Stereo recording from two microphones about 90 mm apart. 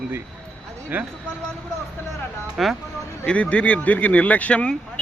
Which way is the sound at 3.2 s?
15° left (ahead or behind).